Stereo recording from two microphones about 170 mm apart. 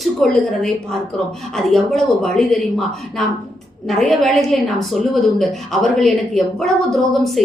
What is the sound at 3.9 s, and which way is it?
A woman's voice, centre (ahead or behind).